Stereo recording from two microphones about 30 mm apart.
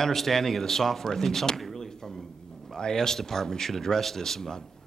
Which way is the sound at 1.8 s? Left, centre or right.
Centre.